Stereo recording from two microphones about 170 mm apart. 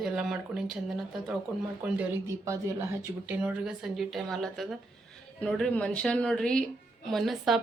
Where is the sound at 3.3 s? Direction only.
5° right (ahead or behind).